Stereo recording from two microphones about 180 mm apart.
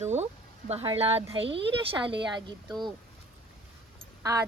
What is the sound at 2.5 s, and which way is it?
Speech, 25° right (ahead or behind).